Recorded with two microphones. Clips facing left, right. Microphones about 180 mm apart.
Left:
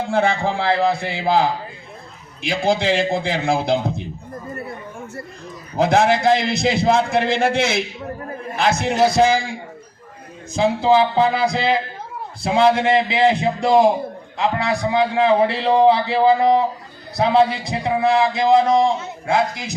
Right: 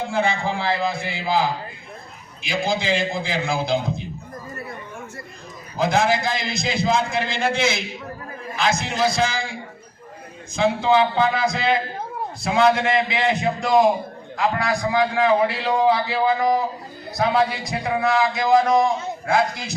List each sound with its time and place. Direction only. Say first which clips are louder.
0.3 s speech: left 4 dB; 70° left (ahead or behind)
2.4 s a man's voice: left 5 dB; 65° left (ahead or behind)
5.7 s a man's voice: left 4 dB; 65° left (ahead or behind)
10.5 s a man's voice: left 3 dB; 35° left (ahead or behind); by 19.7 s 20° left (ahead or behind)